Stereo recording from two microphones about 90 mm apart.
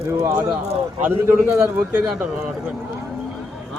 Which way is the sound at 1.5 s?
25° right (ahead or behind).